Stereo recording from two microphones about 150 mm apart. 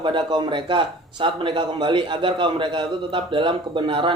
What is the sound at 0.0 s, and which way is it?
A man's voice, 30° right (ahead or behind).